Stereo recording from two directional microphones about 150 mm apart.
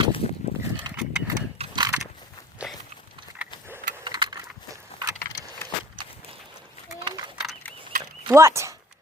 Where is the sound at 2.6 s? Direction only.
10° right (ahead or behind).